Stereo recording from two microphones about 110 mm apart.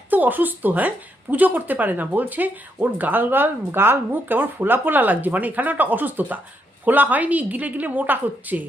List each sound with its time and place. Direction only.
0.1 s a woman's voice: 15° right (ahead or behind)